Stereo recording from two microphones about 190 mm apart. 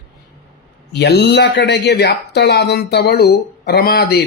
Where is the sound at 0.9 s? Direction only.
60° left (ahead or behind).